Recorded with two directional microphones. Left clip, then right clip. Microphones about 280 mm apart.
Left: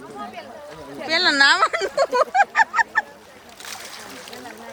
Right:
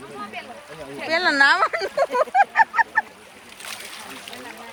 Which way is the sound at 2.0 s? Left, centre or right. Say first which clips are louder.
Even; centre.